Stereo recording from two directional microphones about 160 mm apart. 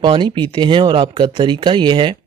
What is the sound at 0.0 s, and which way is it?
Speech, 30° right (ahead or behind).